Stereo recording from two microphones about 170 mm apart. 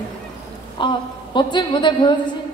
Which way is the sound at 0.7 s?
25° left (ahead or behind).